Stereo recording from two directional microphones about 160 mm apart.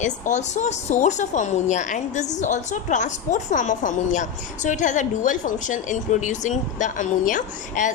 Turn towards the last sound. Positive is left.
turn(degrees=55)  # may be behind; listen again after turning